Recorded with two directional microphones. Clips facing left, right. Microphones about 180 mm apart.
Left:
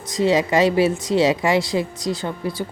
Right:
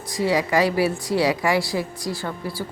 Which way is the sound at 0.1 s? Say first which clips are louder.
Left 3 dB; 20° left (ahead or behind).